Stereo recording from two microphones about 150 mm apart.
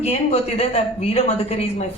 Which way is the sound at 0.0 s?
45° left (ahead or behind).